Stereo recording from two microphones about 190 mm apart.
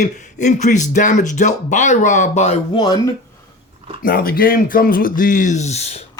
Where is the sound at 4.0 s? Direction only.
50° left (ahead or behind); by 6.0 s 35° left (ahead or behind).